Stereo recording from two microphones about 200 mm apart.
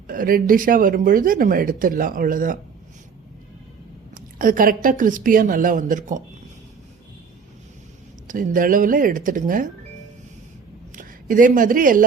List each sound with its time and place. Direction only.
0.1 s speech: 45° right (ahead or behind)
4.4 s speech: 45° right (ahead or behind)
8.3 s speech: 40° right (ahead or behind)
10.9 s speech: 40° right (ahead or behind)